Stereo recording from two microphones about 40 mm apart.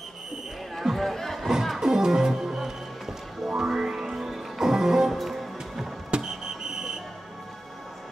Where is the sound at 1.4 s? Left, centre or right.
Centre.